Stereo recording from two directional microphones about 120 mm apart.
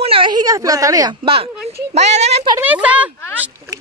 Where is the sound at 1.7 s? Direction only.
65° right (ahead or behind).